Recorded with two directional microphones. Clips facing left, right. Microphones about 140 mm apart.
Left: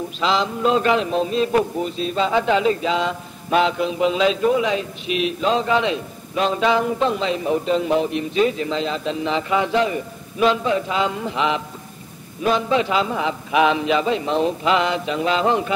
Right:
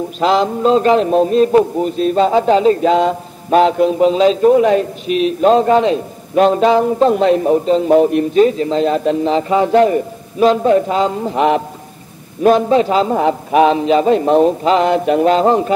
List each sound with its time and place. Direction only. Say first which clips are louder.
0.2 s speech: right 7 dB; 50° right (ahead or behind)
0.6 s speech: right 6 dB; 35° right (ahead or behind)
1.5 s a man's voice: right 7 dB; 35° right (ahead or behind)
1.9 s speech: right 8 dB; 50° right (ahead or behind)
7.5 s speech: right 8 dB; 35° right (ahead or behind)